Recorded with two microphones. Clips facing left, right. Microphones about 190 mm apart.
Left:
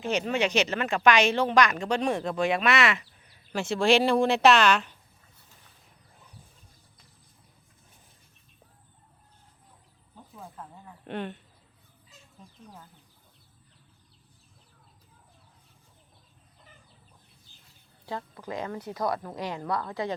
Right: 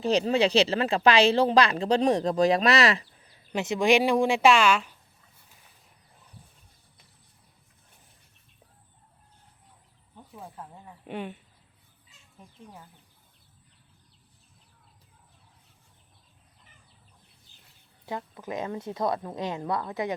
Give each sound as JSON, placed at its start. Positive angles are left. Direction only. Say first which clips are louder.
{"t": 0.0, "sound": "speech", "louder": "right 4 dB", "side_deg": -35}
{"t": 3.5, "sound": "speech", "louder": "right 1 dB", "side_deg": -20}
{"t": 10.3, "sound": "a sound", "louder": "right 1 dB", "side_deg": -10}
{"t": 18.0, "sound": "a woman's voice", "louder": "right 1 dB", "side_deg": -20}